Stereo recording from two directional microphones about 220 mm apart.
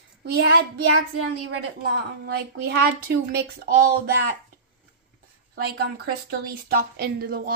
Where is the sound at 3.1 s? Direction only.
45° right (ahead or behind).